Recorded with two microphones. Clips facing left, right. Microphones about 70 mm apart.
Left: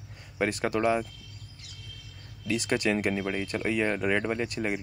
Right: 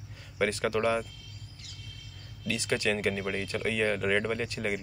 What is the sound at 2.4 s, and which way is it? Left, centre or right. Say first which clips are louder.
Speech: left 2 dB; left.